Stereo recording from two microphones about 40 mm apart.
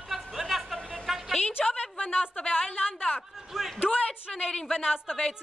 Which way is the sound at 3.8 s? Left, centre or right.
Left.